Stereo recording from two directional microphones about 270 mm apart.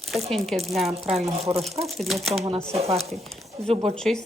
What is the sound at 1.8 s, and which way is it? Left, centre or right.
Speech, centre.